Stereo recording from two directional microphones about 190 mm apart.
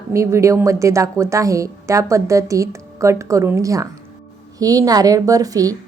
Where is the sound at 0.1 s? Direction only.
15° right (ahead or behind).